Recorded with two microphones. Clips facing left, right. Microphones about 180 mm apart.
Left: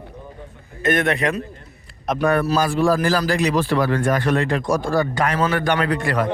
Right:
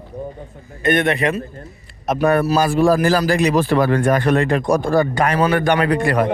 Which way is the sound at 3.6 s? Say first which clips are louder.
Right 3 dB; 50° right (ahead or behind).